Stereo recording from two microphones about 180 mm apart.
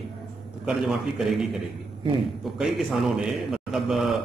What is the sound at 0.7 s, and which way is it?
Speech, centre (ahead or behind).